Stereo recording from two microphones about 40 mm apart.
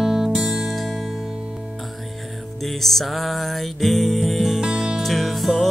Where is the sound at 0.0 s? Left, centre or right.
Centre.